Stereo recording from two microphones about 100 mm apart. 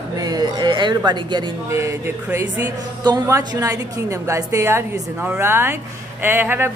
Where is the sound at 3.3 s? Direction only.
35° right (ahead or behind).